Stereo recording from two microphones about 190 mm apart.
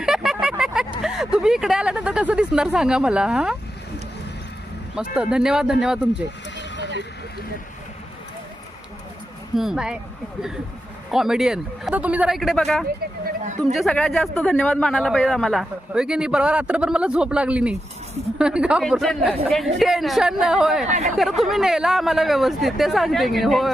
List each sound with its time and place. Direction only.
0.0 s a sound: centre (ahead or behind)
1.0 s speech: 5° right (ahead or behind)
5.1 s speech: 5° right (ahead or behind)
9.6 s speech: 5° right (ahead or behind)
11.1 s speech: centre (ahead or behind)
13.2 s a sound: 40° right (ahead or behind)
13.7 s speech: centre (ahead or behind)
20.8 s speech: 40° right (ahead or behind)
21.2 s speech: centre (ahead or behind)